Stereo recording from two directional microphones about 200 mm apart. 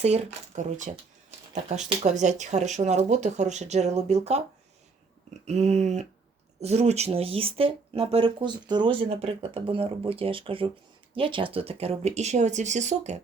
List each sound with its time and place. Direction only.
0.0 s speech: 35° right (ahead or behind)
2.0 s speech: 35° right (ahead or behind)
5.5 s speech: 35° right (ahead or behind)